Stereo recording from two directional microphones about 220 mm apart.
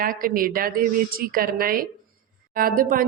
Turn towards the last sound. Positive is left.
turn(degrees=-40)  # may be behind; listen again after turning